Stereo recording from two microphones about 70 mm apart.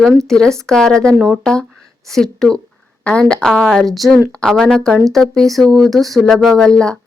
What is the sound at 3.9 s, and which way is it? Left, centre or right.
Speech, centre.